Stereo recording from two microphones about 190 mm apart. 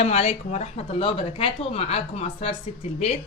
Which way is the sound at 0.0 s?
35° left (ahead or behind).